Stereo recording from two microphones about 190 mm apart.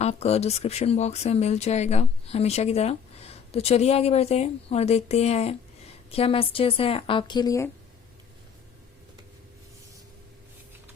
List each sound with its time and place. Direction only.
0.0 s speech: 35° left (ahead or behind); by 7.7 s 20° left (ahead or behind)